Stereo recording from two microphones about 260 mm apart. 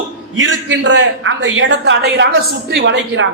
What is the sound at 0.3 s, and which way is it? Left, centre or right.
A man's voice, right.